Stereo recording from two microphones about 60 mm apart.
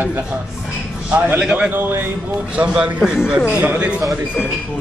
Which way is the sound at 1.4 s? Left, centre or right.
Centre.